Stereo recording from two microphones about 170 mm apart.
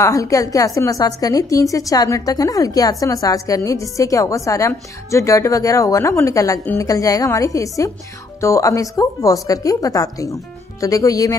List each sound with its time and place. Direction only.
0.0 s a woman's voice: 20° left (ahead or behind)